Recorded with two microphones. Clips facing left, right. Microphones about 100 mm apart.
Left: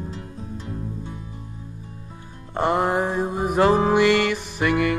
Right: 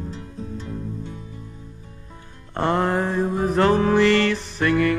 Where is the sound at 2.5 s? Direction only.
15° left (ahead or behind).